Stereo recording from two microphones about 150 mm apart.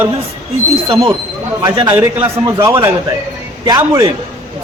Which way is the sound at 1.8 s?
15° right (ahead or behind).